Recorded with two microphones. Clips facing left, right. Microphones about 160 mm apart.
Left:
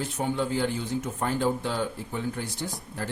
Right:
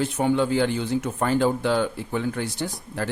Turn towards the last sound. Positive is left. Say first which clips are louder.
# right 5 dB
turn(degrees=-80)